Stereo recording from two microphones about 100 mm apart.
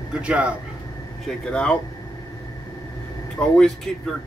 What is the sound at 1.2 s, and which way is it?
Speech, 5° left (ahead or behind).